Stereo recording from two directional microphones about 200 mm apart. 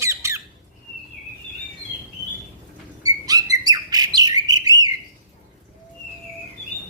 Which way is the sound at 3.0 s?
20° right (ahead or behind).